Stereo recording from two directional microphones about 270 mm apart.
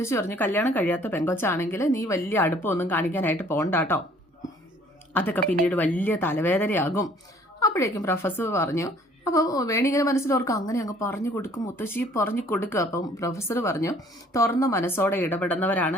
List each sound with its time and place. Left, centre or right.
0.0 s a woman's voice: centre
5.1 s a woman's voice: centre